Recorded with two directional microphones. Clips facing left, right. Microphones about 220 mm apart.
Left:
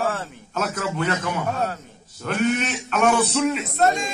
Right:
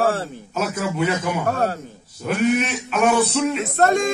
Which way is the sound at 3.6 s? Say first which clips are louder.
Right 3 dB; 55° right (ahead or behind).